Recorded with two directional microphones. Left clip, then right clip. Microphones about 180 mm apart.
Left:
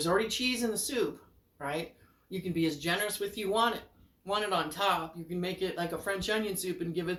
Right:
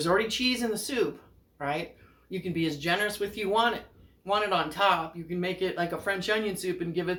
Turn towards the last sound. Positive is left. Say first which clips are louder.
# right 4 dB
turn(degrees=0)  # may be behind; listen again after turning